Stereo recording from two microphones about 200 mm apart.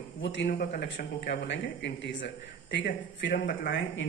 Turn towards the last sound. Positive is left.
turn(degrees=65)  # may be behind; listen again after turning